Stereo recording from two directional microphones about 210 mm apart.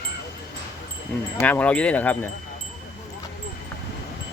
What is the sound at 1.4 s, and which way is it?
Speech, 5° left (ahead or behind).